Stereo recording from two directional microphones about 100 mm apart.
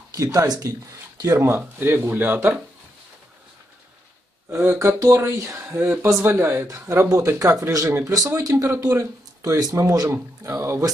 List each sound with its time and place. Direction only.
0.1 s speech: 30° right (ahead or behind)
1.5 s speech: 20° right (ahead or behind)
4.5 s speech: 25° right (ahead or behind)